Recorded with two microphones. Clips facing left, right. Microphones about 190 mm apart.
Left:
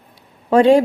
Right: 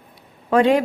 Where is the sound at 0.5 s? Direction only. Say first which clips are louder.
Left 5 dB; 30° left (ahead or behind).